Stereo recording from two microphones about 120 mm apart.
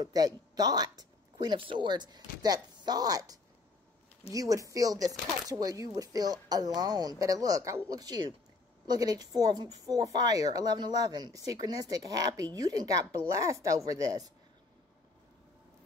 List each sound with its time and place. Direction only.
0.0 s speech: 35° right (ahead or behind)